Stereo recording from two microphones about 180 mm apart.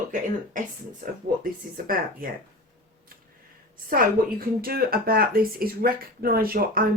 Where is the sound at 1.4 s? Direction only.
50° right (ahead or behind).